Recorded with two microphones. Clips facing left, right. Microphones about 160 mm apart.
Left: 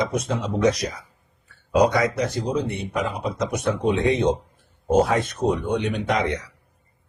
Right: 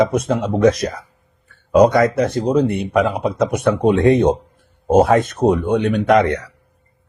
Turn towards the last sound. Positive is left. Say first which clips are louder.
# right 9 dB
turn(degrees=-60)  # may be behind; listen again after turning